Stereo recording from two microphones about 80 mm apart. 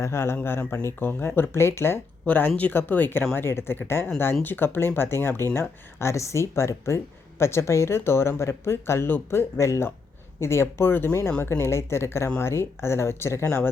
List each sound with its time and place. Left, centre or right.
0.0 s speech: left
2.2 s speech: centre; by 13.6 s left